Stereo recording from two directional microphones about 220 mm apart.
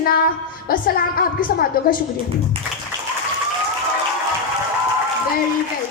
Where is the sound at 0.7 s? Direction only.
40° left (ahead or behind).